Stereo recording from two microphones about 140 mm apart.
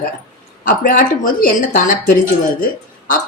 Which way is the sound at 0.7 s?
75° left (ahead or behind).